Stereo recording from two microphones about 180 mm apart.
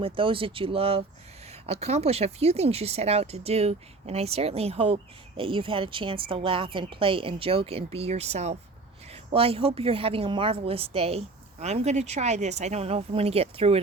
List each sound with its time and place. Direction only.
0.0 s speech: 30° right (ahead or behind)